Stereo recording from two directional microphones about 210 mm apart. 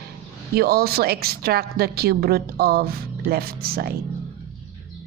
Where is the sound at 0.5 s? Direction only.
45° right (ahead or behind).